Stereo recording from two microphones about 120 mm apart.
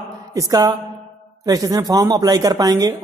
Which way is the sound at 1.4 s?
30° right (ahead or behind).